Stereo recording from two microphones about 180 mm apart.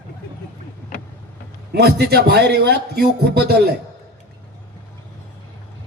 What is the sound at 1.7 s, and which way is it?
A man's voice, 65° right (ahead or behind).